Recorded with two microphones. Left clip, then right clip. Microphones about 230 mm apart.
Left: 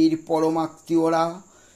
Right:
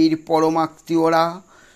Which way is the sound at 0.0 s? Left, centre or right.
Right.